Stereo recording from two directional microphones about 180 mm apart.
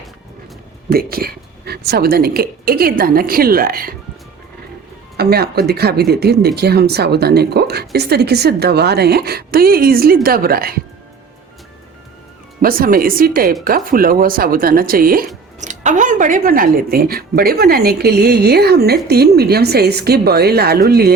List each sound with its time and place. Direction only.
0.9 s speech: 55° right (ahead or behind)
5.1 s speech: 60° right (ahead or behind)
12.6 s speech: 55° right (ahead or behind)
15.6 s speech: 40° right (ahead or behind); by 21.1 s 60° right (ahead or behind)